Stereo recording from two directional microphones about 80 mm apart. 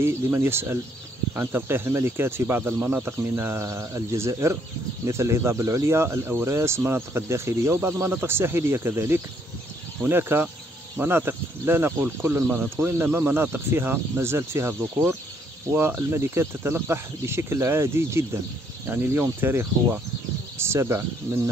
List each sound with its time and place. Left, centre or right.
0.0 s speech: right